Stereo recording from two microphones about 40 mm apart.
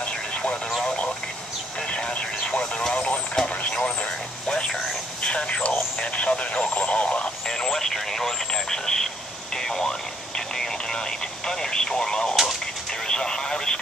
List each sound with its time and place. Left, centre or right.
0.0 s vehicle: left
0.8 s a sound: left
1.9 s vehicle: left
5.2 s radio: left
6.3 s speech: left
7.4 s radio: centre